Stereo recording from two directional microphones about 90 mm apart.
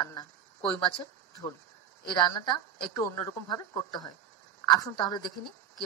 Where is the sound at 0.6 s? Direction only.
15° left (ahead or behind).